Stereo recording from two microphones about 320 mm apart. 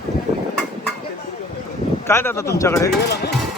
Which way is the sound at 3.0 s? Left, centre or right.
Left.